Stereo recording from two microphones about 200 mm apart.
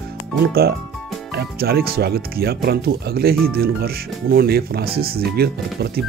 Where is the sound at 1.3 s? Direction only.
50° right (ahead or behind).